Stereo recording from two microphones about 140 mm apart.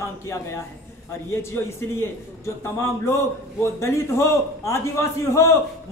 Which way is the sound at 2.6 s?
20° left (ahead or behind).